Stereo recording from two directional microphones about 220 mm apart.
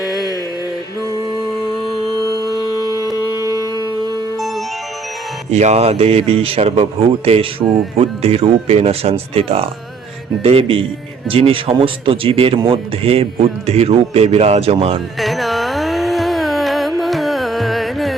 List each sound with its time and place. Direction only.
0.0 s mantra: centre (ahead or behind)
2.5 s music: 15° left (ahead or behind)
3.1 s music: 15° right (ahead or behind)
5.5 s speech: 30° right (ahead or behind)
15.2 s music: centre (ahead or behind)
17.0 s carnatic music: centre (ahead or behind)